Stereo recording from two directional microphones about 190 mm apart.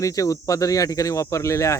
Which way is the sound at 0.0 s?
15° left (ahead or behind).